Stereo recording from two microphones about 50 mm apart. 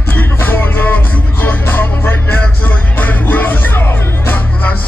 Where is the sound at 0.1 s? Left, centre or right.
Left.